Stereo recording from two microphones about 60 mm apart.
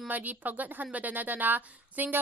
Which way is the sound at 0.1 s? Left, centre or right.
Right.